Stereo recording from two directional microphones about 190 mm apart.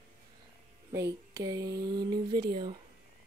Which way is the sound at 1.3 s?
20° right (ahead or behind).